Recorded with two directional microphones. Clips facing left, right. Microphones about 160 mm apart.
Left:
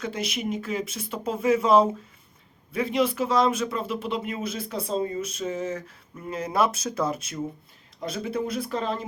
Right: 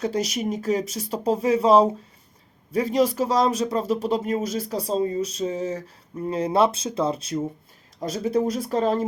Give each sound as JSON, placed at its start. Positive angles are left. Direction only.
{"t": 0.0, "sound": "speech", "side_deg": -40}